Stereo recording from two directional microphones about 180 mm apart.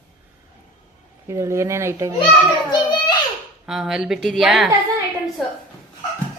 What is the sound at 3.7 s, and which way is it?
A woman's voice, 5° right (ahead or behind).